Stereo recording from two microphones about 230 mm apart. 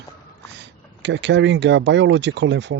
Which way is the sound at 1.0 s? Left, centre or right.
Right.